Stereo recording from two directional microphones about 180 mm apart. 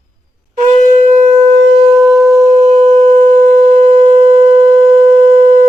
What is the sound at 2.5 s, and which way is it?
Shofar, 35° right (ahead or behind).